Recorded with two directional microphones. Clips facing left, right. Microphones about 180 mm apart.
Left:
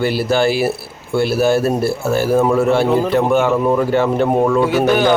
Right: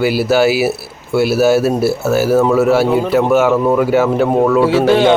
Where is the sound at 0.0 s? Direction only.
5° right (ahead or behind).